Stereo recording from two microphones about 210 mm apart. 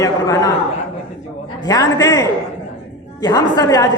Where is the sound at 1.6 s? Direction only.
15° left (ahead or behind).